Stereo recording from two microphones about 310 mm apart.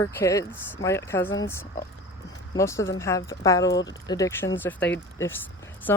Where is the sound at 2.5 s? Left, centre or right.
Centre.